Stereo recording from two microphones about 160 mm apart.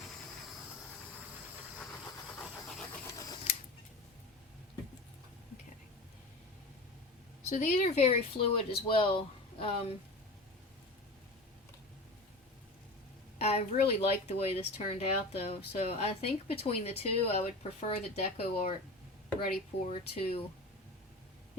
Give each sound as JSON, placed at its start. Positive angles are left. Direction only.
{"t": 2.3, "sound": "a sound", "side_deg": 10}
{"t": 3.1, "sound": "scratch", "side_deg": 20}
{"t": 7.5, "sound": "speech", "side_deg": 45}
{"t": 13.4, "sound": "speech", "side_deg": 40}
{"t": 19.9, "sound": "speech", "side_deg": 35}